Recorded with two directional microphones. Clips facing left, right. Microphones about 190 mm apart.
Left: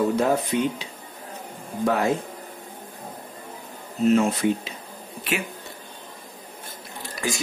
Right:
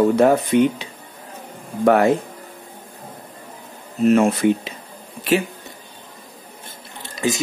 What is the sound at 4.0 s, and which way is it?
Speech, 65° right (ahead or behind).